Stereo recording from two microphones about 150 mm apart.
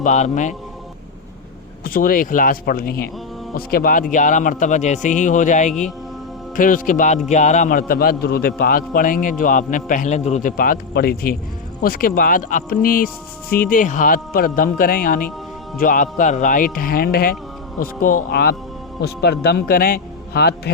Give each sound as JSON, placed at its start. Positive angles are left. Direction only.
{"t": 0.0, "sound": "a man's voice", "side_deg": 55}
{"t": 1.8, "sound": "speech", "side_deg": 75}
{"t": 3.7, "sound": "speech", "side_deg": 75}
{"t": 4.1, "sound": "a man's voice", "side_deg": 60}
{"t": 10.6, "sound": "speech", "side_deg": 80}
{"t": 11.8, "sound": "speech", "side_deg": 70}
{"t": 17.7, "sound": "a man's voice", "side_deg": 65}